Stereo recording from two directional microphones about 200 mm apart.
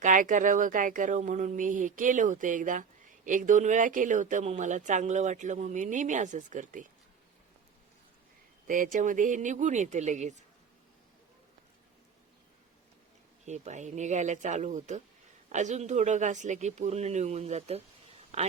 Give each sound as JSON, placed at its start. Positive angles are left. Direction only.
{"t": 0.0, "sound": "speech", "side_deg": -40}
{"t": 8.6, "sound": "speech", "side_deg": -40}
{"t": 13.4, "sound": "a man's voice", "side_deg": -35}